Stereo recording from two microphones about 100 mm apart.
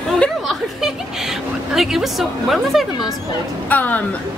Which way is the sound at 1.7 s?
5° right (ahead or behind).